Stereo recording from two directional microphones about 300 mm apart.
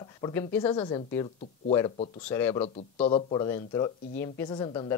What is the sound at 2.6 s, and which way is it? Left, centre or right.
Speech, centre.